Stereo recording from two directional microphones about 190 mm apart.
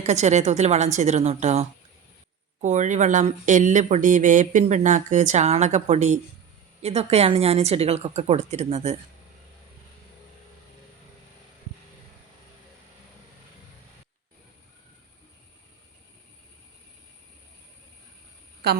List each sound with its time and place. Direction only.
0.0 s speech: 35° right (ahead or behind)